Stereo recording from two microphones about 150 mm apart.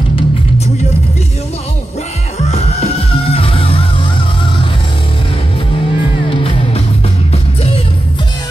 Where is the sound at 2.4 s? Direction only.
45° left (ahead or behind).